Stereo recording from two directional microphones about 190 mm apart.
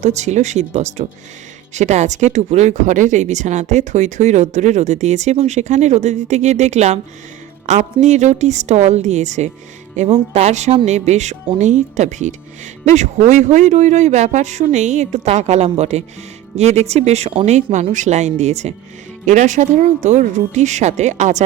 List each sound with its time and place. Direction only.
0.0 s speech: 35° right (ahead or behind)